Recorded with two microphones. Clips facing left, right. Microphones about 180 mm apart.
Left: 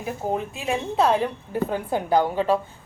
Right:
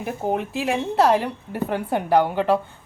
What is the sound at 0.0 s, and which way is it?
A woman's voice, 85° right.